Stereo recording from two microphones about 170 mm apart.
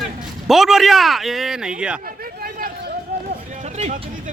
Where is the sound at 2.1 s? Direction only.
60° right (ahead or behind).